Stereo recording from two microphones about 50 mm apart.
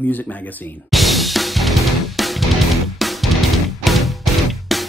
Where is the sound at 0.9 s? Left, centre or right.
Centre.